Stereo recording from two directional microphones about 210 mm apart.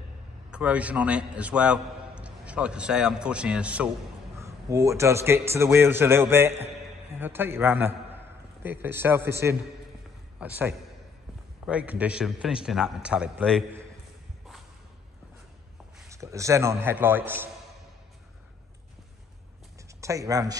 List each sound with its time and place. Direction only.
0.5 s a man's voice: 5° right (ahead or behind)
16.1 s a man's voice: 15° right (ahead or behind)
20.0 s speech: 15° right (ahead or behind)